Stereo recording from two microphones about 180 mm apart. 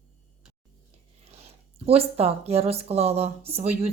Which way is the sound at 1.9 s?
35° right (ahead or behind).